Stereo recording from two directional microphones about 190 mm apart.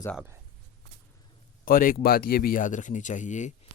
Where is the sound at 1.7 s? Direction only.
50° left (ahead or behind).